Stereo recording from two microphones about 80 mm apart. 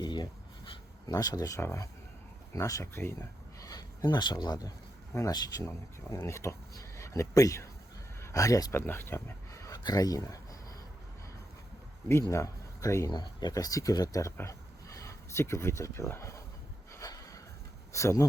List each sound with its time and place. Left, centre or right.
0.0 s a sound: left
1.1 s speech: left
1.6 s speech: left
3.6 s speech: left
8.7 s speech: left
9.8 s speech: left
12.3 s speech: left
13.1 s speech: left
13.5 s speech: left
14.3 s a sound: left
17.9 s speech: left